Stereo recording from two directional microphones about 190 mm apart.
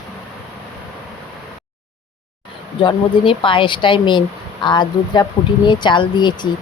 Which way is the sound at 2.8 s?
25° left (ahead or behind).